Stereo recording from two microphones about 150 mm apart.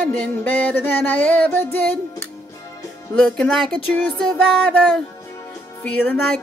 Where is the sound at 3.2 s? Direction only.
5° left (ahead or behind).